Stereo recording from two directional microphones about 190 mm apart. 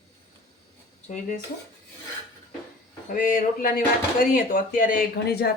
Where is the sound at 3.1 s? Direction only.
50° left (ahead or behind).